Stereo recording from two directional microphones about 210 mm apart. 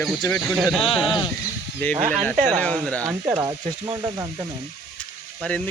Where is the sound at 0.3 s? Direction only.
5° left (ahead or behind).